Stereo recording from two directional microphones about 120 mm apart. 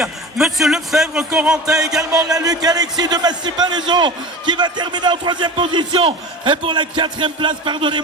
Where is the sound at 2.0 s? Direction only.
30° right (ahead or behind).